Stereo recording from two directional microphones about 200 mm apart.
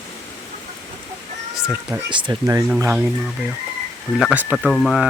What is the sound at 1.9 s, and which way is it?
Speech, 25° right (ahead or behind).